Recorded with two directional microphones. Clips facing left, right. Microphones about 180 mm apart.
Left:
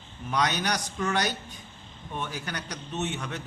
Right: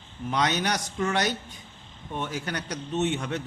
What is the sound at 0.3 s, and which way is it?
A man's voice, 20° right (ahead or behind).